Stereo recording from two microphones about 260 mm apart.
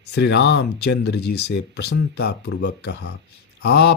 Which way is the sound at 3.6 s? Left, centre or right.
Left.